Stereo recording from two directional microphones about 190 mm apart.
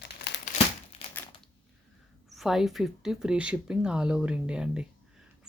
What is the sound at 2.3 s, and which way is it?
Speech, centre (ahead or behind).